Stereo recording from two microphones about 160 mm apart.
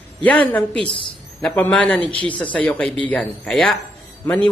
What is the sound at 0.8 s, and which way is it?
Speech, 30° left (ahead or behind).